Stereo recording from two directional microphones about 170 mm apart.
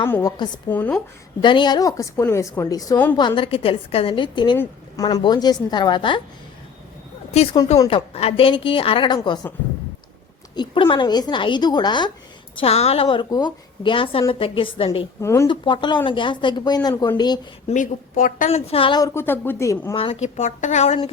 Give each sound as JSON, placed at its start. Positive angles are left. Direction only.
{"t": 0.0, "sound": "a woman's voice", "side_deg": 15}
{"t": 0.7, "sound": "a woman's voice", "side_deg": 10}
{"t": 1.4, "sound": "a woman's voice", "side_deg": 30}
{"t": 4.5, "sound": "a woman's voice", "side_deg": 15}
{"t": 5.0, "sound": "a woman's voice", "side_deg": 25}
{"t": 7.9, "sound": "a woman's voice", "side_deg": 35}
{"t": 10.5, "sound": "a woman's voice", "side_deg": 30}
{"t": 12.5, "sound": "a woman's voice", "side_deg": 35}
{"t": 15.2, "sound": "a woman's voice", "side_deg": 15}
{"t": 15.4, "sound": "a woman's voice", "side_deg": 30}
{"t": 17.7, "sound": "a woman's voice", "side_deg": 50}
{"t": 19.9, "sound": "a woman's voice", "side_deg": 30}
{"t": 20.2, "sound": "a woman's voice", "side_deg": 40}